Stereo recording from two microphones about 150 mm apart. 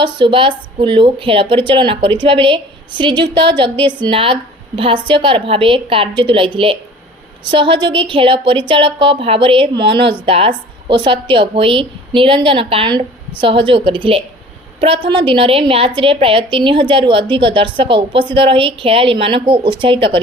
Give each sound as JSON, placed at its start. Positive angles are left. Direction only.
{"t": 0.0, "sound": "a woman's voice", "side_deg": -35}
{"t": 7.5, "sound": "a woman's voice", "side_deg": -35}